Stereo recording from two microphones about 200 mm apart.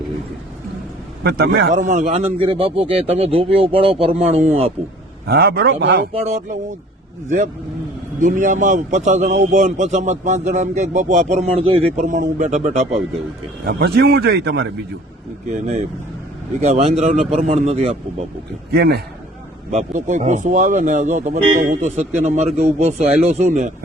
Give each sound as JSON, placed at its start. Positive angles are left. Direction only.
{"t": 1.2, "sound": "a man's voice", "side_deg": -55}
{"t": 5.2, "sound": "a man's voice", "side_deg": -50}
{"t": 6.1, "sound": "a man's voice", "side_deg": -35}
{"t": 12.0, "sound": "a man's voice", "side_deg": -40}
{"t": 13.7, "sound": "a man's voice", "side_deg": -55}
{"t": 15.6, "sound": "a man's voice", "side_deg": -35}
{"t": 18.7, "sound": "a man's voice", "side_deg": -55}
{"t": 19.7, "sound": "a man's voice", "side_deg": -35}